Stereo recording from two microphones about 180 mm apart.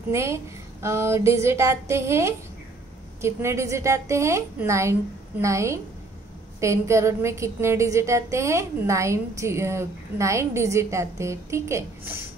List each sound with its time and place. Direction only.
0.1 s a woman's voice: 15° right (ahead or behind)